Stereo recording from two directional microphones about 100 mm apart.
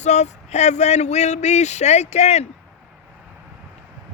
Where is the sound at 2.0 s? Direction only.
90° left.